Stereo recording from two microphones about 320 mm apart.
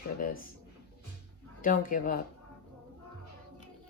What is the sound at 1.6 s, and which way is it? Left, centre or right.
Speech, left.